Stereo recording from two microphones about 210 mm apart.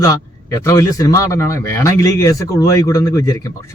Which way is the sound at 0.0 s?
15° left (ahead or behind).